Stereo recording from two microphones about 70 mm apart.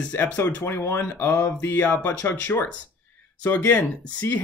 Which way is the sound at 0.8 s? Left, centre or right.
Left.